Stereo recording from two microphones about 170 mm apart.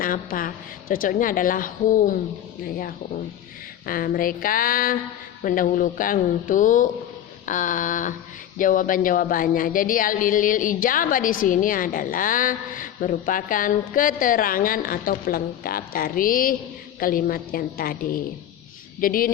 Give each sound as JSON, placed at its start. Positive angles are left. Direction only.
{"t": 0.0, "sound": "a woman's voice", "side_deg": 55}